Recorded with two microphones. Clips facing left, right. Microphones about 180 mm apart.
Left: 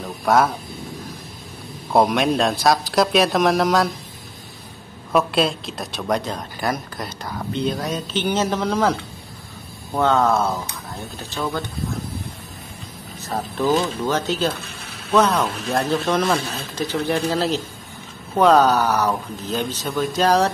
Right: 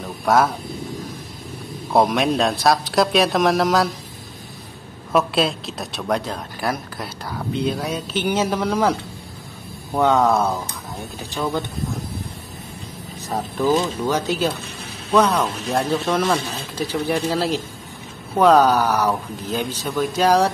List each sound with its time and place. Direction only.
0.0 s vehicle: centre (ahead or behind)
1.9 s speech: centre (ahead or behind)
5.1 s speech: centre (ahead or behind)
10.1 s speech: centre (ahead or behind)
11.1 s speech: 15° right (ahead or behind)
13.3 s speech: 10° right (ahead or behind)